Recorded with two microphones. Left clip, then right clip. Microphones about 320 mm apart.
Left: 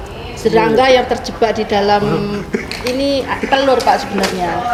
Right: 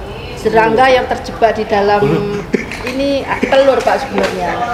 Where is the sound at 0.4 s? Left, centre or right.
Left.